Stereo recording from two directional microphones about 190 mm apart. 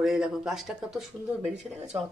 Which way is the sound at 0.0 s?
Centre (ahead or behind).